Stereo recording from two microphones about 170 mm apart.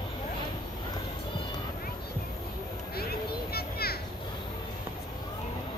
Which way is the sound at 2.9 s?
65° left (ahead or behind).